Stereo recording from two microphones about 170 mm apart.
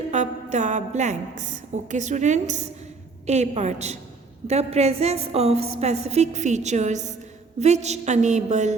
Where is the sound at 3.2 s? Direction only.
40° right (ahead or behind).